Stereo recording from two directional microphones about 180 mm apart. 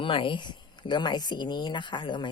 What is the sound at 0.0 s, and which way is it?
Speech, 30° left (ahead or behind).